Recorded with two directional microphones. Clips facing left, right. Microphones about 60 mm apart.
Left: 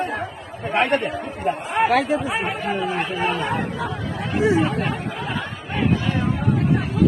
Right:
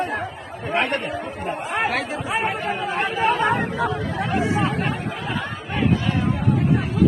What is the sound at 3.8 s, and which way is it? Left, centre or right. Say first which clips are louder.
Speech: right 4 dB; right.